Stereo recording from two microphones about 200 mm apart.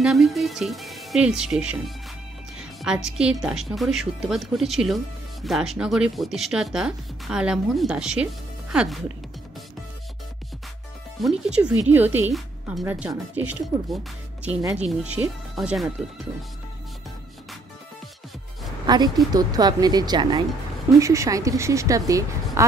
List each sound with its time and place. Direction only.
0.0 s a woman's voice: centre (ahead or behind)
11.1 s a woman's voice: centre (ahead or behind)
18.9 s a woman's voice: 20° right (ahead or behind)